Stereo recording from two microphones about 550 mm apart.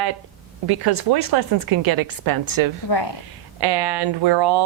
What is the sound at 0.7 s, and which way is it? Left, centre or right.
Speech, right.